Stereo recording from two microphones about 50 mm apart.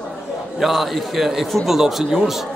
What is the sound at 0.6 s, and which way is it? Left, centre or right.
A man's voice, centre.